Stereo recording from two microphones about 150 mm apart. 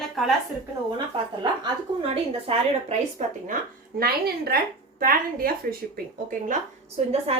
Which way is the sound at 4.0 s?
90° right.